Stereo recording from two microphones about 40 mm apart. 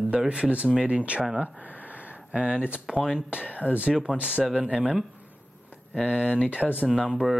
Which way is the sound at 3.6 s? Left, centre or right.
Right.